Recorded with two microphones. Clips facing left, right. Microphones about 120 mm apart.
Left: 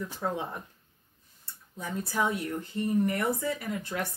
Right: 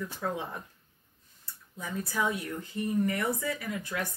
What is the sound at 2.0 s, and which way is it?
Speech, 25° left (ahead or behind).